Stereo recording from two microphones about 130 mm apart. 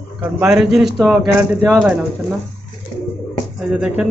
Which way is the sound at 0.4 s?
5° right (ahead or behind).